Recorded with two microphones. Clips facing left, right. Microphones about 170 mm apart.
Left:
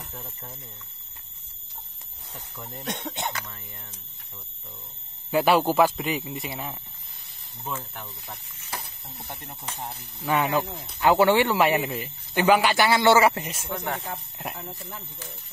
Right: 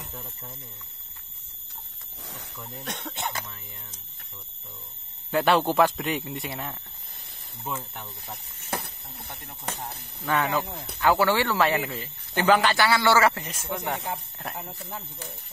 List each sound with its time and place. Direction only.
2.6 s speech: centre (ahead or behind)
5.3 s speech: 5° left (ahead or behind)
8.6 s a sound: 65° right (ahead or behind)
9.8 s speech: 15° left (ahead or behind)
13.7 s speech: 15° right (ahead or behind)